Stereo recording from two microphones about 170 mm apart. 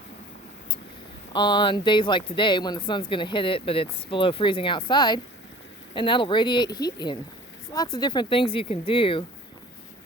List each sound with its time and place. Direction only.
1.3 s speech: 25° left (ahead or behind)